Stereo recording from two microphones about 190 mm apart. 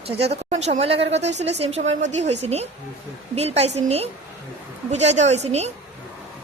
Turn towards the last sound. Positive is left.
turn(degrees=-35)  # may be behind; listen again after turning